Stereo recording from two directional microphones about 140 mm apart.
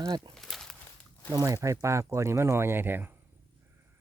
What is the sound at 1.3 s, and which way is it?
Speech, 25° right (ahead or behind).